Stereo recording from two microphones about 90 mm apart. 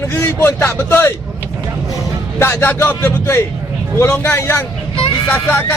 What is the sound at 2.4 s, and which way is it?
A man's voice, 25° left (ahead or behind).